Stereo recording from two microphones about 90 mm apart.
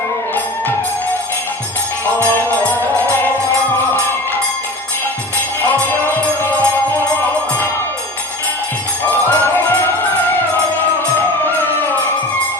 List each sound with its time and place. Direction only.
2.3 s music: 20° left (ahead or behind)
9.0 s music: 20° left (ahead or behind)